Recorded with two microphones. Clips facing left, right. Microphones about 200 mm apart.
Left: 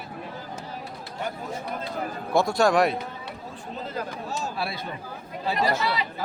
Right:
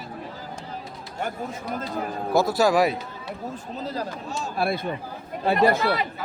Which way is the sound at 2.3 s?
5° right (ahead or behind).